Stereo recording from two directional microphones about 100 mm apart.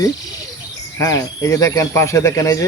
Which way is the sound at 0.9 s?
30° left (ahead or behind).